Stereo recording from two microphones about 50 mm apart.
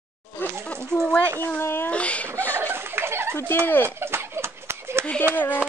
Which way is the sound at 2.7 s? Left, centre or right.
Right.